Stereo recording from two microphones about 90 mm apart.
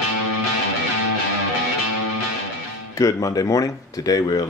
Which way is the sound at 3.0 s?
40° left (ahead or behind).